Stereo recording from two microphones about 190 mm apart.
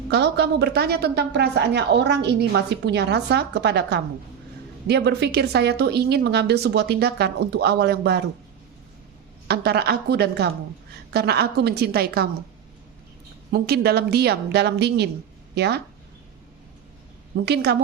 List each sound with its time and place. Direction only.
0.1 s a woman's voice: 60° right (ahead or behind)
9.5 s a woman's voice: 60° right (ahead or behind)
13.5 s a woman's voice: 60° right (ahead or behind)
17.4 s a woman's voice: 60° right (ahead or behind)